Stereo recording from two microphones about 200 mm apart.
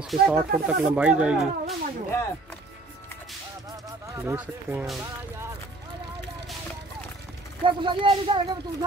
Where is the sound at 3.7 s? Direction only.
15° right (ahead or behind).